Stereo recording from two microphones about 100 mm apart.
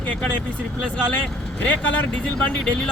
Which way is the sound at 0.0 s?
15° left (ahead or behind).